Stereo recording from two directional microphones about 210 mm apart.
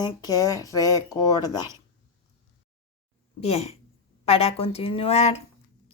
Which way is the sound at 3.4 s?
30° left (ahead or behind).